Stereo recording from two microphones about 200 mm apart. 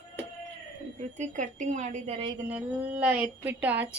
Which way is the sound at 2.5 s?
5° right (ahead or behind).